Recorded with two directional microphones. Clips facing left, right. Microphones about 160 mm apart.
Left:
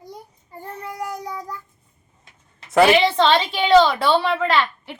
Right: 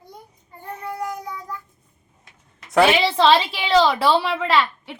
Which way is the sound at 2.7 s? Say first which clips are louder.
Left 2 dB; centre (ahead or behind).